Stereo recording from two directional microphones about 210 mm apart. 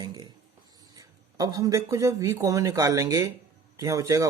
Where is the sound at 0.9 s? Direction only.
15° right (ahead or behind).